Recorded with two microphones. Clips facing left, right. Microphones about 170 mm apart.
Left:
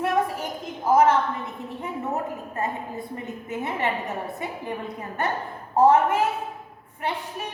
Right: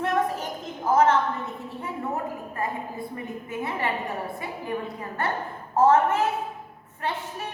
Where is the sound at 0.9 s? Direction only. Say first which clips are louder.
Left 2 dB; 10° left (ahead or behind).